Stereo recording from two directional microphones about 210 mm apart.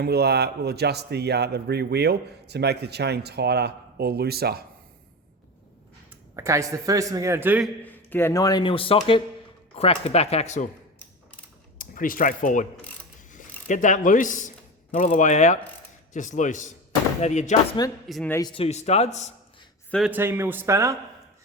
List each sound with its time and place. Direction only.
0.0 s speech: 50° right (ahead or behind)
6.1 s a man's voice: 15° right (ahead or behind)
7.9 s a man's voice: 10° left (ahead or behind); by 10.7 s 35° left (ahead or behind)
11.8 s speech: 40° left (ahead or behind)
17.8 s speech: 20° left (ahead or behind)
18.1 s speech: 5° left (ahead or behind)
18.3 s speech: 25° left (ahead or behind)
19.9 s a man's voice: 5° right (ahead or behind)